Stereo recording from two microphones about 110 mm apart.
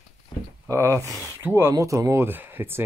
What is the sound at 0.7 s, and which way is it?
Speech, 25° right (ahead or behind).